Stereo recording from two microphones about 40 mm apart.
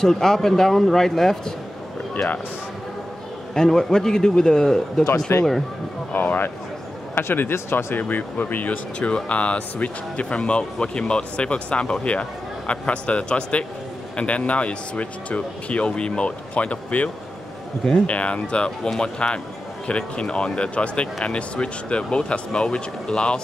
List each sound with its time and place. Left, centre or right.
0.0 s a man's voice: centre
3.5 s a man's voice: centre
6.1 s speech: left
7.2 s speech: left